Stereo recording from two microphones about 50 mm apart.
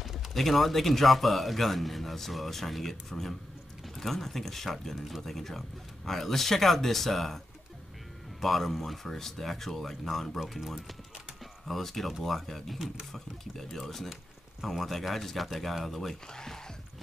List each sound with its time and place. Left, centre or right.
0.3 s speech: centre
8.4 s speech: centre
10.4 s speech: centre
11.6 s speech: centre
13.7 s speech: centre